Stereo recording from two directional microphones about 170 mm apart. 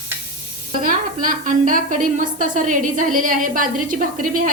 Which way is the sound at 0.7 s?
55° right (ahead or behind).